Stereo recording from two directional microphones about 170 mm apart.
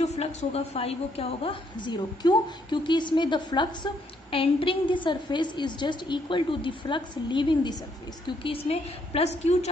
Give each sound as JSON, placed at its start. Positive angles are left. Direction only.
{"t": 0.0, "sound": "a woman's voice", "side_deg": 40}